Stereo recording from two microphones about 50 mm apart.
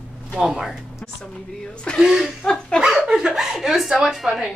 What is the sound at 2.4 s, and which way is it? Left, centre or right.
Speech, centre.